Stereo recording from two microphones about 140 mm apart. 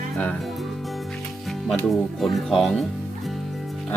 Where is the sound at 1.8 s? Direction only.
Centre (ahead or behind).